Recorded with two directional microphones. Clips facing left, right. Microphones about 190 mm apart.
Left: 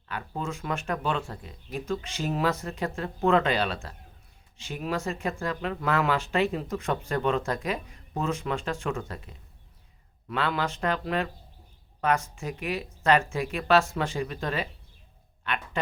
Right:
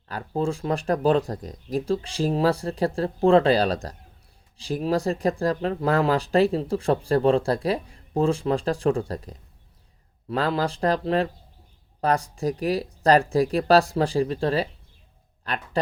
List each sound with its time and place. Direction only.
0.1 s speech: 35° right (ahead or behind)